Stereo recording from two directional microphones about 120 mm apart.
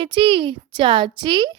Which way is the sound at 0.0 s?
45° right (ahead or behind).